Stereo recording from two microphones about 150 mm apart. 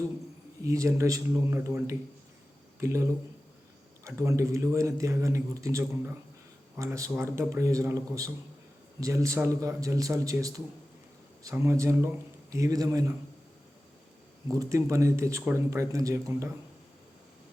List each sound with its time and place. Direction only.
0.6 s a man's voice: 20° right (ahead or behind)
14.4 s a man's voice: 20° right (ahead or behind)